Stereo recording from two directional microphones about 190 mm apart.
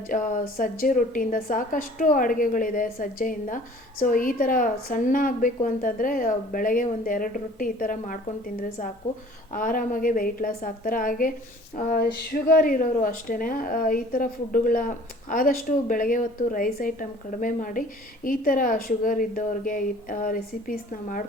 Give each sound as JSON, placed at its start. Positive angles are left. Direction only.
{"t": 0.1, "sound": "speech", "side_deg": 45}
{"t": 9.5, "sound": "speech", "side_deg": 45}